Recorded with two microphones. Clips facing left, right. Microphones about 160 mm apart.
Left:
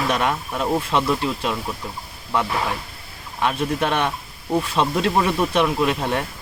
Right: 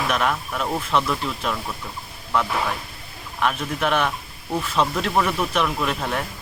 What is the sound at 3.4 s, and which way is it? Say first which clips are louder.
Speech: left 2 dB; 25° left (ahead or behind).